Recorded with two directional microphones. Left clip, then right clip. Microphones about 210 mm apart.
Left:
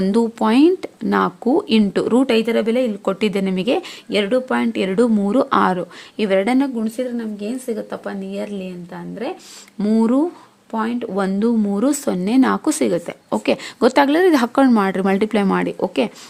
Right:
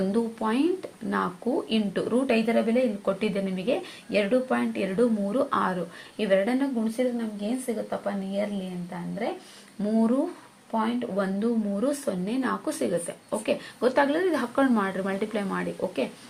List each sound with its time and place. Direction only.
0.1 s speech: 55° left (ahead or behind)
9.8 s speech: 55° left (ahead or behind)